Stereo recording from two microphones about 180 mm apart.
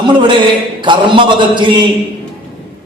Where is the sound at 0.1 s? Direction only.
25° right (ahead or behind).